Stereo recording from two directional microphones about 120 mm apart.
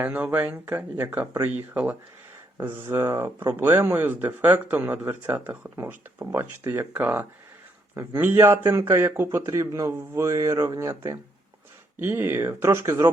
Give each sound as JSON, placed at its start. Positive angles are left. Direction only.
{"t": 0.0, "sound": "speech", "side_deg": -15}